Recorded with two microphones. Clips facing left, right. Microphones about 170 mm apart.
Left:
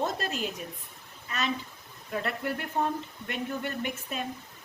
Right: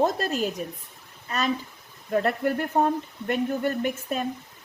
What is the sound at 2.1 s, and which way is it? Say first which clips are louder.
A woman's voice: right 8 dB; 45° right (ahead or behind).